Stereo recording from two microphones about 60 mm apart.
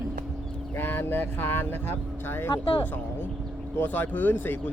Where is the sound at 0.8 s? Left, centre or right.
Left.